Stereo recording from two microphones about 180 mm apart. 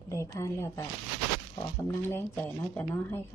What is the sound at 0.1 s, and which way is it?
Speech, 15° left (ahead or behind).